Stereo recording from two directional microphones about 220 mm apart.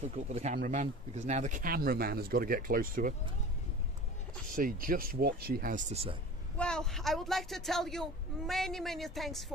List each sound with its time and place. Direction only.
0.3 s speech: 30° right (ahead or behind)
4.5 s speech: 40° right (ahead or behind)
6.6 s speech: 5° left (ahead or behind)